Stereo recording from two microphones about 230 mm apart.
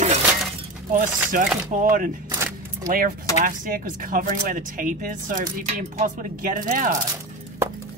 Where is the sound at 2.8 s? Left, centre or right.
Right.